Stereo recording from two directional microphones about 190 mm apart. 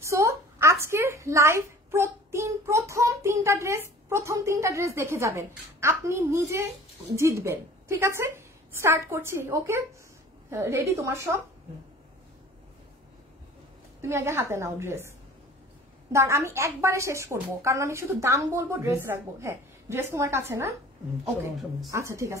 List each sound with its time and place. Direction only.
0.0 s a woman's voice: 15° right (ahead or behind)
14.0 s a woman's voice: 15° right (ahead or behind)
21.9 s a woman's voice: 15° right (ahead or behind)